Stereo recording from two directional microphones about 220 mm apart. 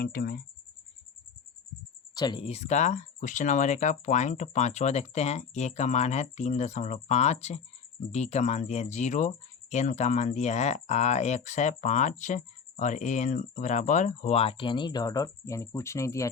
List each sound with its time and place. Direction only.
0.0 s speech: 45° left (ahead or behind)
2.1 s speech: 20° left (ahead or behind)